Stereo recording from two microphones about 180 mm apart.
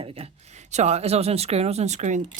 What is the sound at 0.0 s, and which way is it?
Speech, 35° right (ahead or behind).